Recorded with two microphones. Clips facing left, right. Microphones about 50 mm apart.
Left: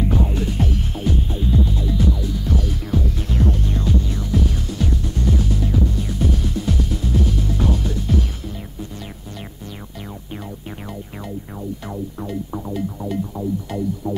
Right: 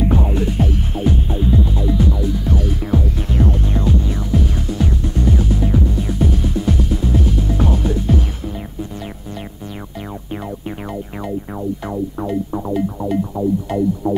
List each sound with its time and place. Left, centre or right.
0.0 s music: centre
12.2 s music: right